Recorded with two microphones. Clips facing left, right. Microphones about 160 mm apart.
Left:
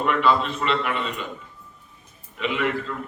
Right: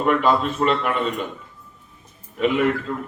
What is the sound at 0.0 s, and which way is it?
A man's voice, 45° right (ahead or behind).